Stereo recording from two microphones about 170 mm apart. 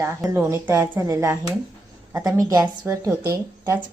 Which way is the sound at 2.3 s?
20° right (ahead or behind).